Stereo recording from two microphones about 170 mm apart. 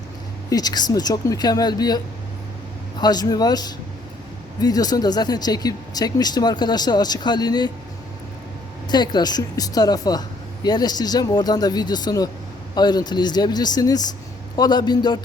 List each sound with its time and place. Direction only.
0.5 s speech: 25° left (ahead or behind)
3.0 s speech: 25° left (ahead or behind)
8.9 s speech: 25° left (ahead or behind)